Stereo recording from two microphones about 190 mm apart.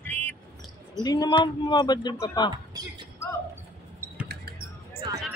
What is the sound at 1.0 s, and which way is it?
Speech, 20° left (ahead or behind).